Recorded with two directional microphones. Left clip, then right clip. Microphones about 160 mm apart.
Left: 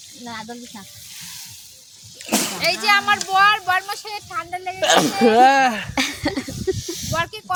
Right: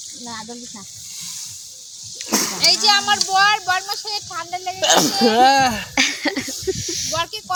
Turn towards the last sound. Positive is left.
turn(degrees=-15)  # may be behind; listen again after turning